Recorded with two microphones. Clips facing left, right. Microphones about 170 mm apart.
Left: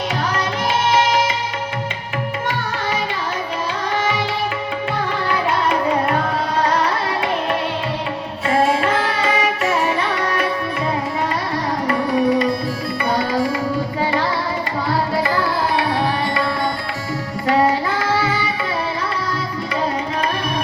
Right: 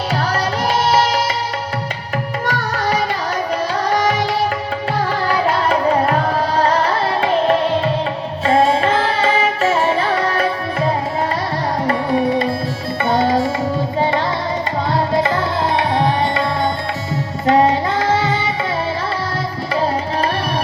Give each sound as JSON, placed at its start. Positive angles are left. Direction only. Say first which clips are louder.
{"t": 0.9, "sound": "music", "louder": "even", "side_deg": -35}
{"t": 2.5, "sound": "music", "louder": "right 7 dB", "side_deg": -40}
{"t": 3.8, "sound": "tabla", "louder": "right 4 dB", "side_deg": -40}
{"t": 5.3, "sound": "music", "louder": "right 2 dB", "side_deg": -40}
{"t": 8.4, "sound": "carnatic music", "louder": "right 3 dB", "side_deg": -30}
{"t": 11.9, "sound": "music", "louder": "even", "side_deg": -25}
{"t": 15.1, "sound": "tabla", "louder": "right 2 dB", "side_deg": -20}
{"t": 17.4, "sound": "child singing", "louder": "right 3 dB", "side_deg": -20}